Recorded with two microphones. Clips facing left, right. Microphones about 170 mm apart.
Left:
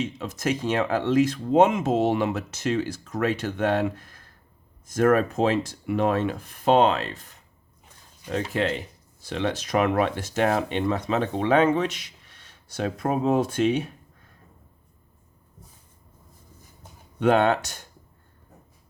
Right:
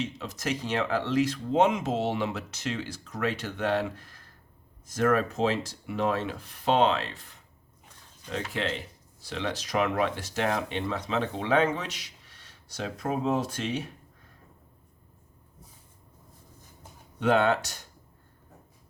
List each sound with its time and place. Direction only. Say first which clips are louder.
0.0 s speech: left 5 dB; 50° left (ahead or behind)
8.3 s speech: left 6 dB; 45° left (ahead or behind)
17.2 s speech: left 3 dB; 50° left (ahead or behind)